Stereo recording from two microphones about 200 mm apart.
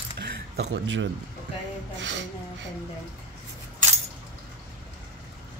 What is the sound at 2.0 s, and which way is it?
Speech, 60° right (ahead or behind).